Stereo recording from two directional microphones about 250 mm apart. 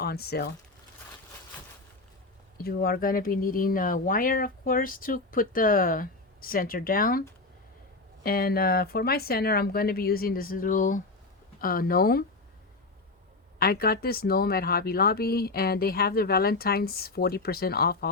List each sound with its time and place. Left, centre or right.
0.0 s speech: left
2.6 s speech: left
13.6 s speech: left